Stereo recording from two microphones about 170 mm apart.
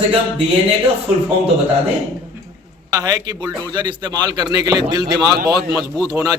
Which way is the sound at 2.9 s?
20° right (ahead or behind).